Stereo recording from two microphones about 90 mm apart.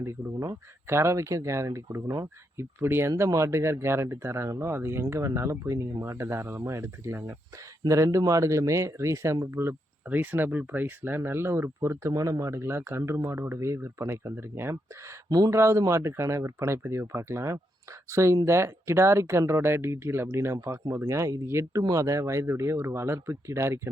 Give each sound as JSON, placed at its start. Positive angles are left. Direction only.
{"t": 0.0, "sound": "speech", "side_deg": -30}
{"t": 3.1, "sound": "speech", "side_deg": -40}
{"t": 15.3, "sound": "speech", "side_deg": -45}
{"t": 15.5, "sound": "speech", "side_deg": -30}